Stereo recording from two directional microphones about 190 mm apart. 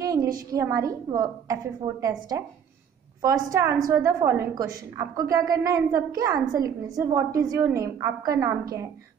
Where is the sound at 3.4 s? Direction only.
20° right (ahead or behind).